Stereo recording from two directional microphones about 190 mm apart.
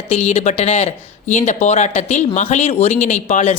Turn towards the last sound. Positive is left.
turn(degrees=40)  # may be behind; listen again after turning